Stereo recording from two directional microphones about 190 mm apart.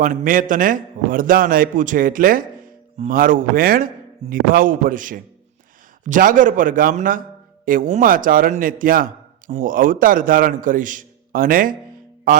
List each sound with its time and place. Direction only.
0.0 s a man's voice: 45° right (ahead or behind)
12.3 s music: 45° right (ahead or behind)